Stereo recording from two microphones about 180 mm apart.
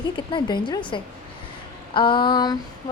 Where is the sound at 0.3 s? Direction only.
25° left (ahead or behind).